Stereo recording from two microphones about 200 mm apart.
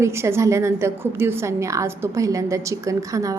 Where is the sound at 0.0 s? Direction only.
15° right (ahead or behind).